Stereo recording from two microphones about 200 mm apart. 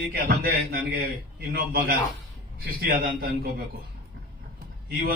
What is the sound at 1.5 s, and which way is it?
A man's voice, 50° right (ahead or behind).